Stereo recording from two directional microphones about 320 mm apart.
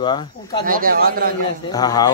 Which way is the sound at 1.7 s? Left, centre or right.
Centre.